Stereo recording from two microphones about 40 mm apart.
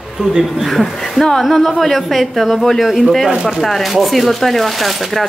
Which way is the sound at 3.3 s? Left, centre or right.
Right.